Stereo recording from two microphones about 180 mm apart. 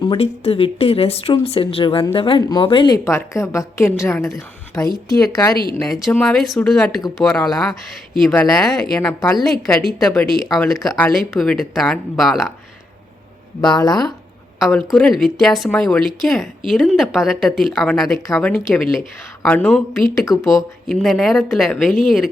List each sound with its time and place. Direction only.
0.0 s a woman's voice: 30° left (ahead or behind)
6.1 s a woman's voice: centre (ahead or behind)
9.0 s a woman's voice: 10° left (ahead or behind)
9.3 s a woman's voice: centre (ahead or behind)
13.6 s speech: 20° left (ahead or behind)
14.6 s a woman's voice: centre (ahead or behind)
18.3 s a woman's voice: 15° left (ahead or behind)
18.5 s a woman's voice: centre (ahead or behind)
19.4 s speech: 10° left (ahead or behind)
20.3 s a woman's voice: centre (ahead or behind)